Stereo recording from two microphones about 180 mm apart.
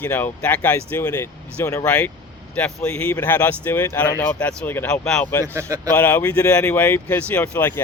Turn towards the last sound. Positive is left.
turn(degrees=10)  # may be behind; listen again after turning